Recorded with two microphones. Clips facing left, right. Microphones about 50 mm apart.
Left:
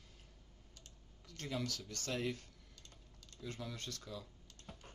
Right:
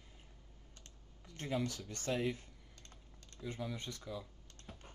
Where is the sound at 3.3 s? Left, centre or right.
Centre.